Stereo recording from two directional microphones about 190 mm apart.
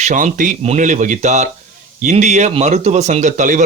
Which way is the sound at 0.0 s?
40° right (ahead or behind).